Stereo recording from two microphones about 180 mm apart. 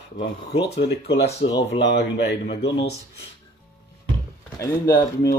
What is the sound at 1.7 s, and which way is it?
Speech, 75° left (ahead or behind).